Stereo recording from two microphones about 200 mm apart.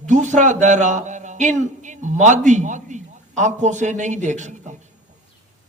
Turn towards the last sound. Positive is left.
turn(degrees=-35)  # may be behind; listen again after turning